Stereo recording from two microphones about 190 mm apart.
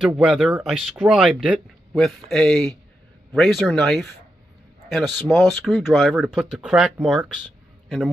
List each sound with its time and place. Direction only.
0.0 s speech: 5° right (ahead or behind)